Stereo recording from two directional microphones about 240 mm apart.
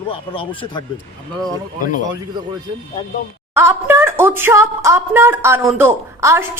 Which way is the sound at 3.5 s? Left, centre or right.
Centre.